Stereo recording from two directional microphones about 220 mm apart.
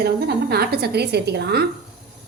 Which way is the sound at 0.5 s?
45° right (ahead or behind).